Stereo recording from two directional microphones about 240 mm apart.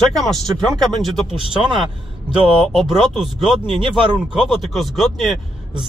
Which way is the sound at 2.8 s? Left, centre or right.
Centre.